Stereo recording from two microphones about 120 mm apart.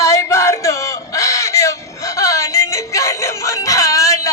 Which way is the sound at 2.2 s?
25° left (ahead or behind).